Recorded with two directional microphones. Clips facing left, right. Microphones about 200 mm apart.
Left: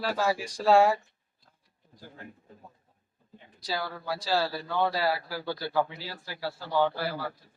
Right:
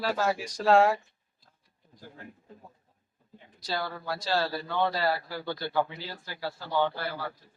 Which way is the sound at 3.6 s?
5° left (ahead or behind).